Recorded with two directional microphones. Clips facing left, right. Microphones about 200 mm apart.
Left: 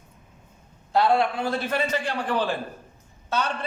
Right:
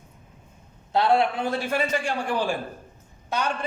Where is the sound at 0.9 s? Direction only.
20° right (ahead or behind).